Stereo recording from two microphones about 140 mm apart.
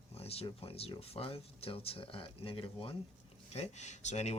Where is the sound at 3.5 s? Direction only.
50° left (ahead or behind).